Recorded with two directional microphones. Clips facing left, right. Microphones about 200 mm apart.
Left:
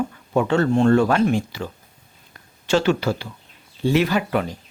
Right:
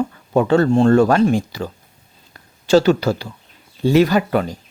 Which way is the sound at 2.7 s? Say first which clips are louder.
Right 5 dB; 40° right (ahead or behind).